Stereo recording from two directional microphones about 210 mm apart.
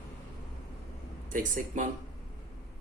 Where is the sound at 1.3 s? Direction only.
40° right (ahead or behind).